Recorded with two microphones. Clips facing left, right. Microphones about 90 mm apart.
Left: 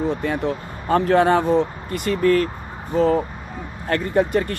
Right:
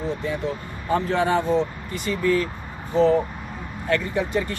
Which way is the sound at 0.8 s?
60° left (ahead or behind).